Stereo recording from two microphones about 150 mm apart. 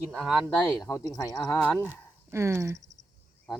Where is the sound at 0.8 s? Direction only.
20° left (ahead or behind).